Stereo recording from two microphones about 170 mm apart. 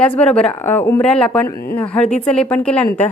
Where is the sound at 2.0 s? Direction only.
40° left (ahead or behind).